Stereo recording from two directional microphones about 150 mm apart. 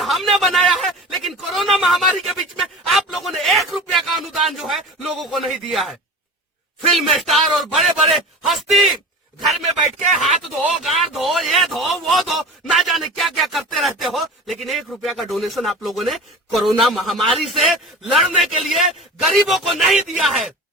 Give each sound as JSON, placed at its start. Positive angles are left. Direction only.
{"t": 0.0, "sound": "a sound", "side_deg": 0}
{"t": 2.9, "sound": "speech", "side_deg": 0}
{"t": 6.9, "sound": "speech", "side_deg": 0}
{"t": 10.2, "sound": "speech", "side_deg": 0}